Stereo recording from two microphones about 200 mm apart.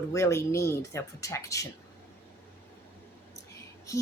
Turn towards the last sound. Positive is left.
turn(degrees=15)  # may be behind; listen again after turning